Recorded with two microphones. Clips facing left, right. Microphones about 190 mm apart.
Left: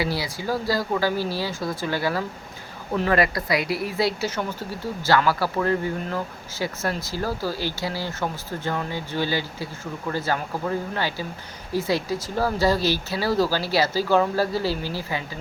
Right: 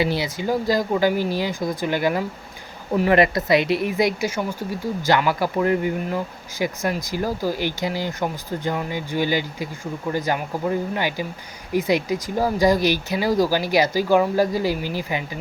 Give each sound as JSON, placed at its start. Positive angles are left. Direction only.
{"t": 0.0, "sound": "speech", "side_deg": -20}
{"t": 3.2, "sound": "speech", "side_deg": -25}